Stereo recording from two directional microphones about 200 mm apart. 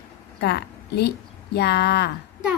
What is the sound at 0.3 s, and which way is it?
A woman's voice, 55° left (ahead or behind).